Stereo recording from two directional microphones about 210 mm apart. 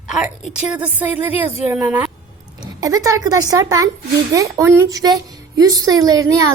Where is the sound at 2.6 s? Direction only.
15° right (ahead or behind).